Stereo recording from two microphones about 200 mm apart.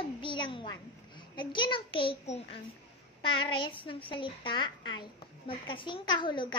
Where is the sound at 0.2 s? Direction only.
25° left (ahead or behind).